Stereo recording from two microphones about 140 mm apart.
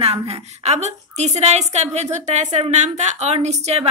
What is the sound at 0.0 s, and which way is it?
A woman's voice, 45° right (ahead or behind).